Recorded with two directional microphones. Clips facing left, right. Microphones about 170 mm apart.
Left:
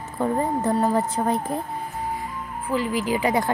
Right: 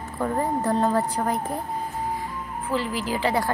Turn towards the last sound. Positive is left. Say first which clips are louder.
# left 2 dB
turn(degrees=15)  # may be behind; listen again after turning